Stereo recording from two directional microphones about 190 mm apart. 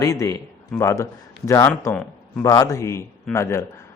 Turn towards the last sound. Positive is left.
turn(degrees=15)  # may be behind; listen again after turning